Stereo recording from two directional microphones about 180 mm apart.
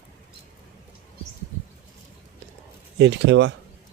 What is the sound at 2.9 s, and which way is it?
Speech, 75° right (ahead or behind).